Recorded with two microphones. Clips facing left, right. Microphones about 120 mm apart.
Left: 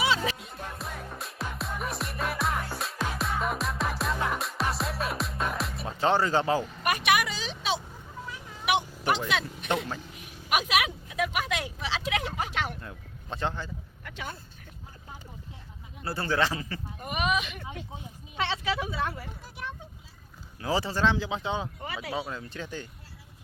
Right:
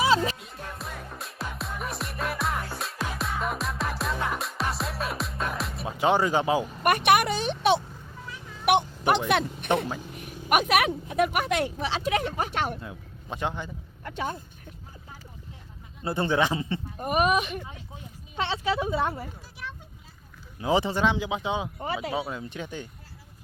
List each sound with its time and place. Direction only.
0.0 s music: 40° right (ahead or behind)
0.3 s music: centre (ahead or behind)
5.9 s speech: 15° right (ahead or behind)
6.8 s a sound: 55° right (ahead or behind)
9.3 s speech: 55° right (ahead or behind)
12.8 s a man's voice: 15° right (ahead or behind)
14.0 s speech: 35° right (ahead or behind)
16.0 s a man's voice: 20° right (ahead or behind)
17.0 s speech: 45° right (ahead or behind)
18.3 s a man's voice: 30° right (ahead or behind)
20.6 s speech: 20° right (ahead or behind)
21.8 s a man's voice: 30° right (ahead or behind)
22.1 s speech: 10° right (ahead or behind)